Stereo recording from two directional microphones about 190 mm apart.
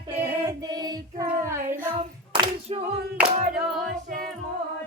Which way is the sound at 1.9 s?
30° right (ahead or behind).